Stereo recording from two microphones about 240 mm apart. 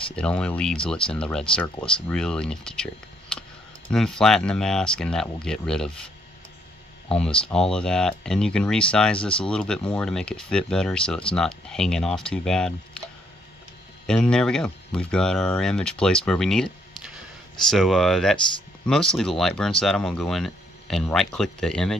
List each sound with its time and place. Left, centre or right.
0.1 s speech: centre
7.1 s speech: centre
14.0 s speech: centre